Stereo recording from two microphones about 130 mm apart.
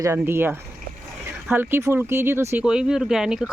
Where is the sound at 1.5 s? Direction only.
20° right (ahead or behind).